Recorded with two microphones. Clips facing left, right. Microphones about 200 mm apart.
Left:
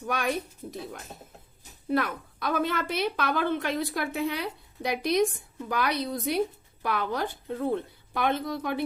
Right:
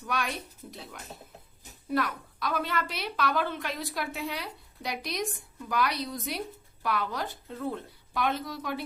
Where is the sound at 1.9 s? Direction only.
50° left (ahead or behind).